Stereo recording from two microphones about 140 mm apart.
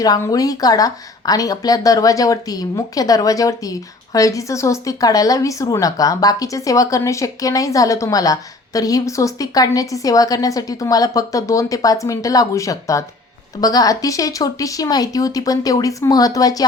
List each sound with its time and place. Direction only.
0.0 s speech: 25° left (ahead or behind)